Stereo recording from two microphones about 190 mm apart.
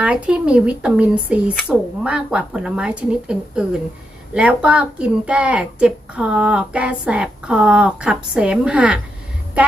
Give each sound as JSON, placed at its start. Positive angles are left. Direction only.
{"t": 0.0, "sound": "speech", "side_deg": -5}
{"t": 9.6, "sound": "music", "side_deg": -5}